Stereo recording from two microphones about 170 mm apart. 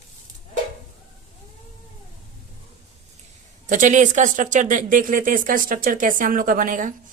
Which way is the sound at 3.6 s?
50° right (ahead or behind).